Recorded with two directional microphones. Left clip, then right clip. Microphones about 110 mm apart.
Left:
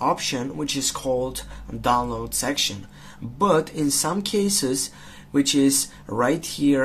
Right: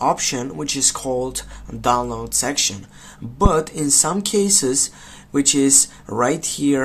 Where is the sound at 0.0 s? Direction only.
40° right (ahead or behind).